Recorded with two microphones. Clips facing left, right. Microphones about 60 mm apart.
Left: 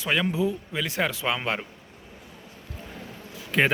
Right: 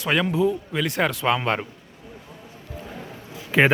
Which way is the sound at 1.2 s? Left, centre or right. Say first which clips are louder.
Right 5 dB; centre.